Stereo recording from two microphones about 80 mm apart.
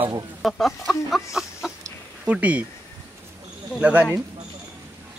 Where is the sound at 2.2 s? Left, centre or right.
Centre.